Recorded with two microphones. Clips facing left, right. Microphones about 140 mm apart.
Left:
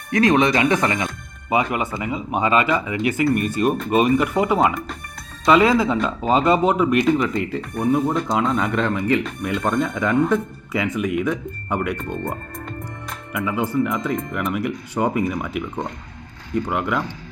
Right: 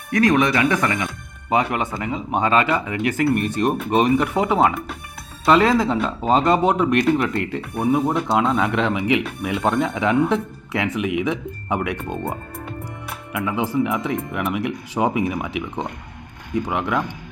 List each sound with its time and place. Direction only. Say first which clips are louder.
0.1 s speech: left 1 dB; 25° left (ahead or behind)
1.0 s music: left 1 dB; 5° left (ahead or behind)
2.0 s speech: even; 5° left (ahead or behind)
2.9 s speech: even; 50° right (ahead or behind)
3.2 s speech: even; centre (ahead or behind)
11.7 s speech: even; centre (ahead or behind)
12.2 s music: even; 5° right (ahead or behind)
13.4 s speech: even; 5° right (ahead or behind)
16.7 s speech: right 1 dB; 5° left (ahead or behind)